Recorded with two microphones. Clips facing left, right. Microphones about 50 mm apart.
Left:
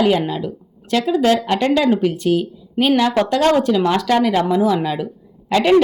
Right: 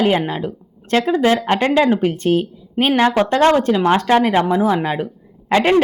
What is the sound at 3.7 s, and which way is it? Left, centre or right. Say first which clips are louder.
A woman's voice: right 2 dB; right.